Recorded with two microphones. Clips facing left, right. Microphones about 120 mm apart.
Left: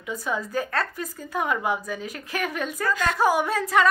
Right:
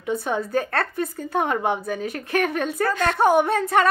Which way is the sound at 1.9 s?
55° right (ahead or behind).